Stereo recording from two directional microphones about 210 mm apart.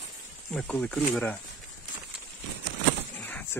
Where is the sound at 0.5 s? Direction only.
5° left (ahead or behind).